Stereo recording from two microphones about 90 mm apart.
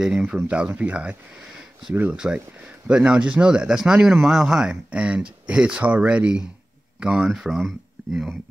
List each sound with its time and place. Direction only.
0.0 s speech: 5° right (ahead or behind)
2.1 s speech: 10° right (ahead or behind)